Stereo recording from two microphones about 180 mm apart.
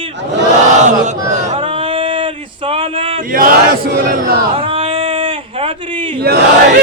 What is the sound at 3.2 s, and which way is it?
Battle cry, 50° right (ahead or behind).